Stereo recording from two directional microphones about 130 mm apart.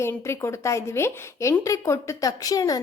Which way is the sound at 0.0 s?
20° left (ahead or behind).